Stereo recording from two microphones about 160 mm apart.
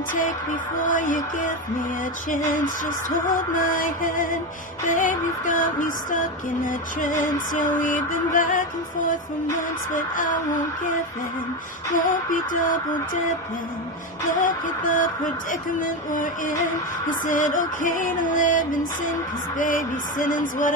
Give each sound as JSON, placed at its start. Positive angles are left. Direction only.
{"t": 0.8, "sound": "female singing", "side_deg": 55}
{"t": 2.5, "sound": "female singing", "side_deg": 55}
{"t": 9.9, "sound": "female singing", "side_deg": 55}
{"t": 11.9, "sound": "female singing", "side_deg": 55}
{"t": 14.3, "sound": "female singing", "side_deg": 55}